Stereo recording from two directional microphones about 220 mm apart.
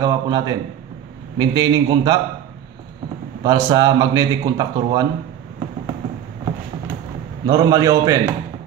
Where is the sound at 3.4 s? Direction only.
15° right (ahead or behind).